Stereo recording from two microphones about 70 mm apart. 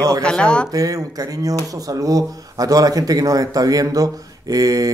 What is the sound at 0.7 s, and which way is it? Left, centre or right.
Speech, right.